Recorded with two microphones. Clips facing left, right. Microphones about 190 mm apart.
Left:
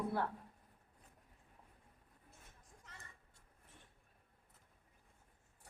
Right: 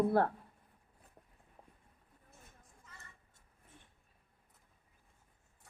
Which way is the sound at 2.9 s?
85° left.